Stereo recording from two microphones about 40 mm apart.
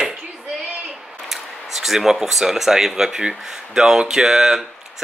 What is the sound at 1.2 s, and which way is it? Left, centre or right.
Speech, centre.